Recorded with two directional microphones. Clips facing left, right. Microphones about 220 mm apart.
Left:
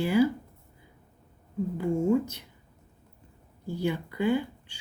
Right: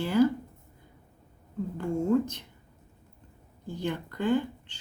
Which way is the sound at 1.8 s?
10° left (ahead or behind).